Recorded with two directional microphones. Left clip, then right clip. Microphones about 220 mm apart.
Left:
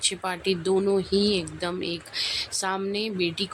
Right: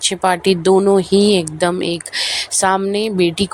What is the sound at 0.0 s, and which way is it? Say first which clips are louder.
Speech: right 12 dB; 35° right (ahead or behind).